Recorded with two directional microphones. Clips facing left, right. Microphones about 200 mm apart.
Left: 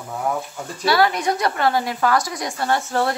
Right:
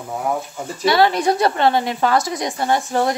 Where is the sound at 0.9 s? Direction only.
25° right (ahead or behind).